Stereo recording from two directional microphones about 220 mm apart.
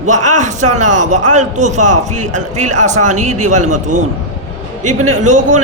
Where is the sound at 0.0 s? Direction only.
35° right (ahead or behind).